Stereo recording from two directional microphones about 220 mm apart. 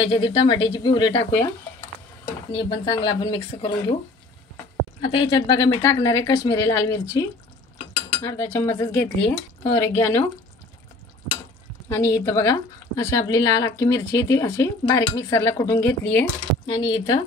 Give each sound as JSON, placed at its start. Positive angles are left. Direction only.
{"t": 0.0, "sound": "speech", "side_deg": 20}
{"t": 2.5, "sound": "speech", "side_deg": 25}
{"t": 5.3, "sound": "speech", "side_deg": 15}
{"t": 11.9, "sound": "speech", "side_deg": 15}